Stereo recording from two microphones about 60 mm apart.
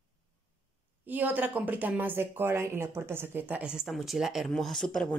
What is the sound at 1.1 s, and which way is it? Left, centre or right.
A woman's voice, right.